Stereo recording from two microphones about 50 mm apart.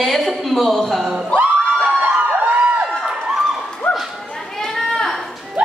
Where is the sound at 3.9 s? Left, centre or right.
Left.